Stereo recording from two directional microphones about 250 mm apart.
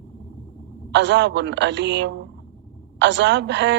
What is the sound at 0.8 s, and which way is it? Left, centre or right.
A man's voice, right.